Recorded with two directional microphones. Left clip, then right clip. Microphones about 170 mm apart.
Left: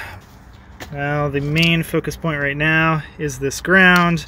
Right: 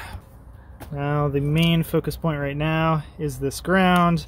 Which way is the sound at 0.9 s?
25° right (ahead or behind).